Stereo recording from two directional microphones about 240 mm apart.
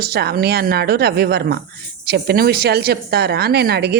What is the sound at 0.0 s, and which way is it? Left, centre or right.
A woman's voice, right.